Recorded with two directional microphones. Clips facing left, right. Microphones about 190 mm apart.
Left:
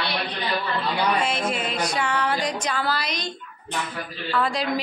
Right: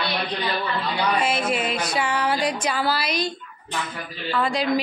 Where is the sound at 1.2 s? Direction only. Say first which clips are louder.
Right 2 dB; 5° right (ahead or behind).